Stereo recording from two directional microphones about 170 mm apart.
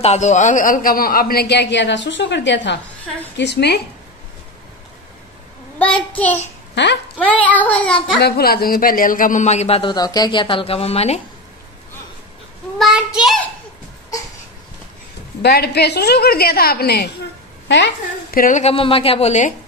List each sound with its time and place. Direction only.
0.0 s a man's voice: 40° left (ahead or behind); by 3.8 s 75° left (ahead or behind)
5.8 s child singing: 10° left (ahead or behind)
6.7 s a child's voice: 90° left
7.2 s child singing: 10° left (ahead or behind)
8.2 s speech: 65° left (ahead or behind); by 11.1 s 35° left (ahead or behind)
12.7 s a child's voice: 5° right (ahead or behind)
15.4 s a man's voice: 70° left (ahead or behind)
17.6 s a woman's voice: 90° left
18.4 s speech: 45° left (ahead or behind)